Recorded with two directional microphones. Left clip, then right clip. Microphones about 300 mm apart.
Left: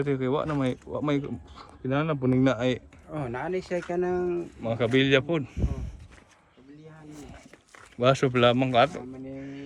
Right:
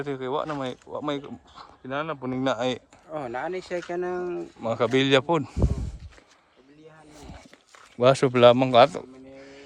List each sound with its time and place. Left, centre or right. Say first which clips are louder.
0.0 s speech: left 2 dB; centre
3.1 s speech: right 1 dB; right
4.7 s speech: right 2 dB; right
7.9 s speech: right 3 dB; centre